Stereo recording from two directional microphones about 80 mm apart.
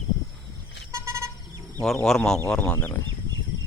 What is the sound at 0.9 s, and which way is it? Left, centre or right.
Vehicle, right.